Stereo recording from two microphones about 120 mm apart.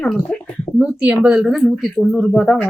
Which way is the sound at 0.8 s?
10° right (ahead or behind).